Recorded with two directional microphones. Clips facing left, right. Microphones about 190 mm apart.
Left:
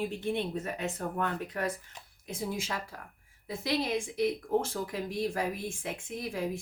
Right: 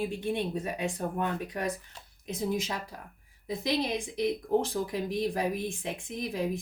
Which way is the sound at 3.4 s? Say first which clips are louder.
Right 2 dB; 15° right (ahead or behind).